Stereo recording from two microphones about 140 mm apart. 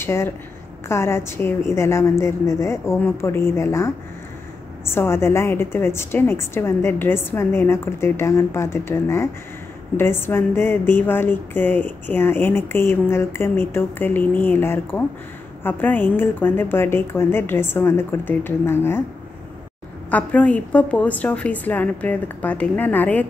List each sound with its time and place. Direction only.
0.0 s a woman's voice: 20° left (ahead or behind)
20.1 s speech: 10° left (ahead or behind)